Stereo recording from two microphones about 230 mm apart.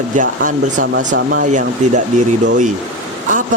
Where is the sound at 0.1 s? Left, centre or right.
Right.